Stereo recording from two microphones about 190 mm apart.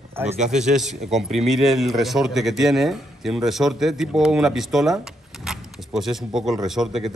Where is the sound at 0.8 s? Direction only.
Centre (ahead or behind).